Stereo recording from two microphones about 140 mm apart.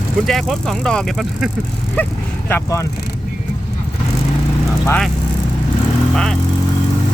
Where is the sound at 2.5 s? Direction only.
20° left (ahead or behind).